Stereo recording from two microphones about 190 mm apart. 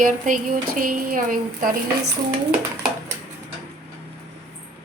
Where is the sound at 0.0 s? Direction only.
45° right (ahead or behind).